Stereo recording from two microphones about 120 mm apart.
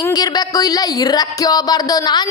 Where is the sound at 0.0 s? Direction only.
35° left (ahead or behind).